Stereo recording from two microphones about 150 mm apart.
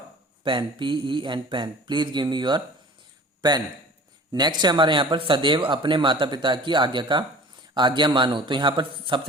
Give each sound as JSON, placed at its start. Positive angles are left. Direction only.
{"t": 0.4, "sound": "speech", "side_deg": -35}
{"t": 4.3, "sound": "speech", "side_deg": -30}